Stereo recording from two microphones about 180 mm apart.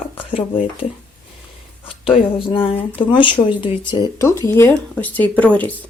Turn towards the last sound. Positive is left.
turn(degrees=10)  # may be behind; listen again after turning